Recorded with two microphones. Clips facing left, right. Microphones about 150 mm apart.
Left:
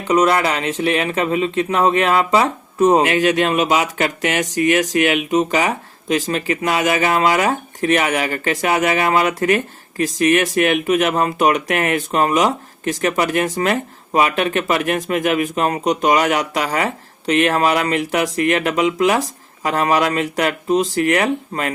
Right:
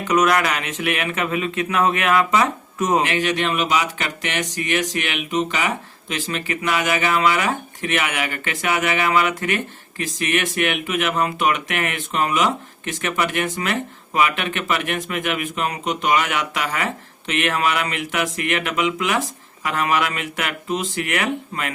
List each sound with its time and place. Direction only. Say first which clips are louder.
0.0 s speech: left 3 dB; 30° left (ahead or behind)